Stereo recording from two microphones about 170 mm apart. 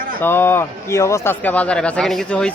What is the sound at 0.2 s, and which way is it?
Speech, 15° left (ahead or behind).